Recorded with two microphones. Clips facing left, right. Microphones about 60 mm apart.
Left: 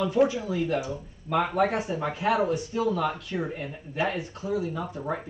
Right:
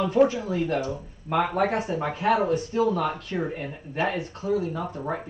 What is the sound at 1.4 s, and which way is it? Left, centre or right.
Speech, centre.